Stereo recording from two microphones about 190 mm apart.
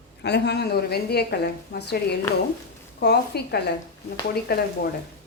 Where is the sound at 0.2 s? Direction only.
60° left (ahead or behind).